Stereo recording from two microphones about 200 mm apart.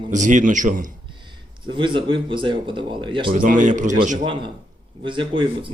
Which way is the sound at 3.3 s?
40° right (ahead or behind).